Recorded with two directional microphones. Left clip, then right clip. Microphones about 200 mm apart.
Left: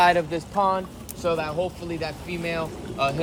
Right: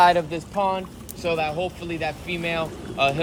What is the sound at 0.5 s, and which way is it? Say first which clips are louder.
Speech: left 1 dB; 45° right (ahead or behind).